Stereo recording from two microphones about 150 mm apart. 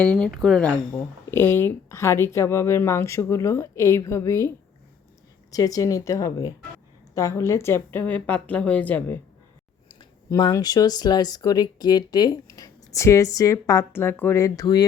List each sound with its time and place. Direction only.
0.0 s speech: 5° left (ahead or behind)
1.3 s a woman's voice: 15° left (ahead or behind)
10.2 s speech: 25° left (ahead or behind)